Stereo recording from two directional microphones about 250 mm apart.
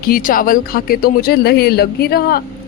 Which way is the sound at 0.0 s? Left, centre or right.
Left.